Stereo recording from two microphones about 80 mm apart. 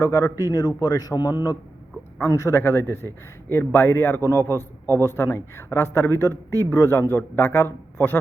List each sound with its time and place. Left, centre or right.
0.0 s speech: left
0.5 s a man's voice: left
2.2 s speech: left